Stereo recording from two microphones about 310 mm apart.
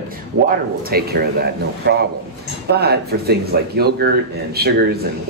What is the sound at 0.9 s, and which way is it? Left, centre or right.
Speech, right.